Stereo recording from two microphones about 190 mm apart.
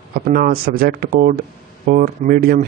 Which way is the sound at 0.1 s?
50° right (ahead or behind).